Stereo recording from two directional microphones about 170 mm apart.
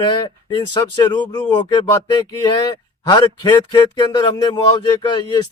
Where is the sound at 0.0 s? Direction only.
30° left (ahead or behind).